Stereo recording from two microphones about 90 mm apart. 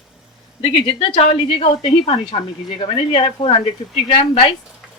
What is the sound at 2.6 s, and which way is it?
Speech, 75° left (ahead or behind).